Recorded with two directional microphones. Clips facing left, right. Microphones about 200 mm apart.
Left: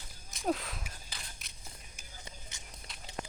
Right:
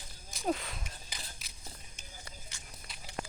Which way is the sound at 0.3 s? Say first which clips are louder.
Even; centre (ahead or behind).